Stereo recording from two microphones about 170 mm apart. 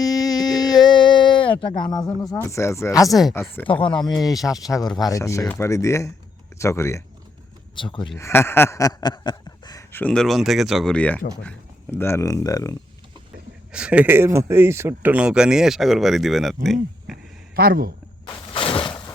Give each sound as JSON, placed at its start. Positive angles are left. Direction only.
{"t": 0.0, "sound": "a sound", "side_deg": 20}
{"t": 1.8, "sound": "speech", "side_deg": 25}
{"t": 3.1, "sound": "speech", "side_deg": 0}
{"t": 3.8, "sound": "speech", "side_deg": 25}
{"t": 7.8, "sound": "speech", "side_deg": 30}
{"t": 8.2, "sound": "speech", "side_deg": 15}
{"t": 10.0, "sound": "speech", "side_deg": 5}
{"t": 13.7, "sound": "speech", "side_deg": -5}
{"t": 17.1, "sound": "a sound", "side_deg": 0}
{"t": 17.5, "sound": "speech", "side_deg": -60}
{"t": 18.3, "sound": "a sound", "side_deg": 30}